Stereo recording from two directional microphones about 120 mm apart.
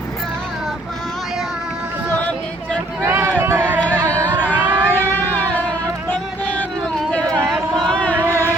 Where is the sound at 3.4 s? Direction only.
15° right (ahead or behind).